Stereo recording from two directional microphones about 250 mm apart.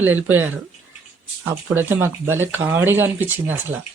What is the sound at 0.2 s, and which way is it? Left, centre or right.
Speech, right.